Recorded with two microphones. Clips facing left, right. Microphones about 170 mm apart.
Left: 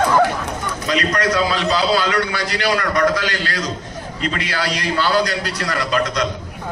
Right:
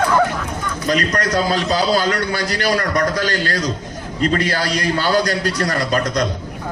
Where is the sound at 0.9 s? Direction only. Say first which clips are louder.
Even; 40° right (ahead or behind).